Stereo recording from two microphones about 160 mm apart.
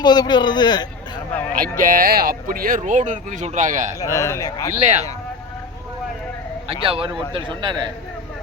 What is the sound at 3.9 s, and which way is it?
Speech, 20° left (ahead or behind).